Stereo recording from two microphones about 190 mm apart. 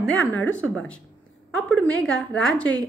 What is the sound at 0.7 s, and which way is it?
A woman's voice, 5° left (ahead or behind).